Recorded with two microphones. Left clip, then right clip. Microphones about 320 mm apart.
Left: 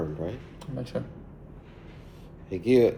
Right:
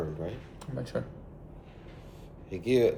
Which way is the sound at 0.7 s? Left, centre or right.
Centre.